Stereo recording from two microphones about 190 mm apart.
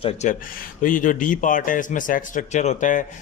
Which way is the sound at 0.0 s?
40° left (ahead or behind).